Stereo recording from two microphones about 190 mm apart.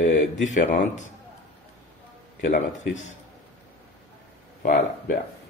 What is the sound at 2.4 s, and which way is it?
Speech, 40° left (ahead or behind).